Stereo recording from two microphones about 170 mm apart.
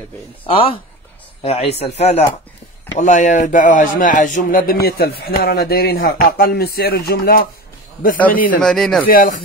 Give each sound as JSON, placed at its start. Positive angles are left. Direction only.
{"t": 0.5, "sound": "speech", "side_deg": 35}
{"t": 8.5, "sound": "speech", "side_deg": 5}
{"t": 9.0, "sound": "speech", "side_deg": 55}